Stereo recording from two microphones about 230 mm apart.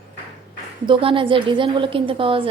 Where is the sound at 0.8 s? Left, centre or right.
Right.